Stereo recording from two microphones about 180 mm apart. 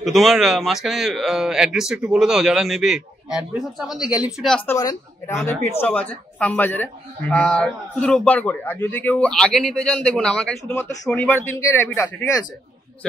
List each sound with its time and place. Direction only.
0.0 s speech: centre (ahead or behind)
4.6 s speech: 15° left (ahead or behind)